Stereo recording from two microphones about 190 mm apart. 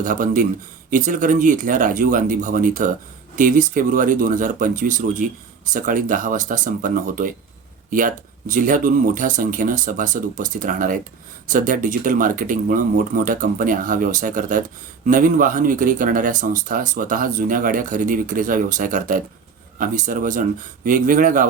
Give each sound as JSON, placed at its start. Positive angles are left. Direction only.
{"t": 0.0, "sound": "speech", "side_deg": -45}